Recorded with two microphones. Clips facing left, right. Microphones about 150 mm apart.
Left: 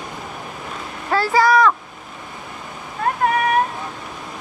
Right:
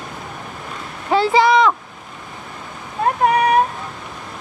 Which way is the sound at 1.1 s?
20° right (ahead or behind).